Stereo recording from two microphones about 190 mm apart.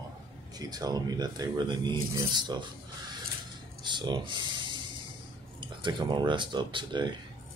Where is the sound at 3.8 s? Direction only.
25° right (ahead or behind).